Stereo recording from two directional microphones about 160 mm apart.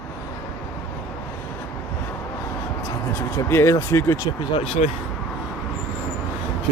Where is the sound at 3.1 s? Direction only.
15° left (ahead or behind).